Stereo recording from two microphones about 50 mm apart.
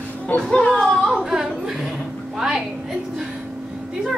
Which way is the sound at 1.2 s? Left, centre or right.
Centre.